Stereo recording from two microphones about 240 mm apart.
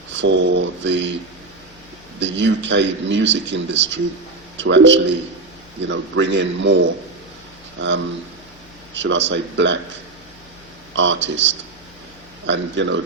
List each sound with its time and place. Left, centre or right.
0.2 s speech: right
2.2 s speech: right
7.8 s speech: right
10.9 s speech: right